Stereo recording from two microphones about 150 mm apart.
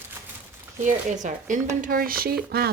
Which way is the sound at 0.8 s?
55° right (ahead or behind).